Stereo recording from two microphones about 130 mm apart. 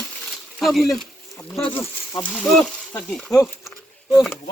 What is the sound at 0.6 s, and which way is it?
Speech, centre (ahead or behind).